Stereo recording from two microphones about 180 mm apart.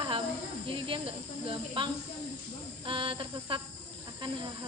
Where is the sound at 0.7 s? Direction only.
30° right (ahead or behind).